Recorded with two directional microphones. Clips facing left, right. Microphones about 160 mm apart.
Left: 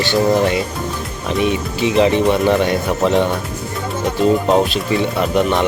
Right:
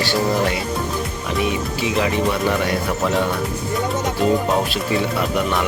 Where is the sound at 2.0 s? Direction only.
25° left (ahead or behind).